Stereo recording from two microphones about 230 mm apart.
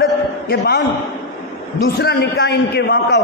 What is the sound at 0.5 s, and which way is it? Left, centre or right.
Speech, left.